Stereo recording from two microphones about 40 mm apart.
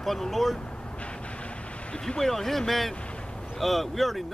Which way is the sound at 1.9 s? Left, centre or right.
Centre.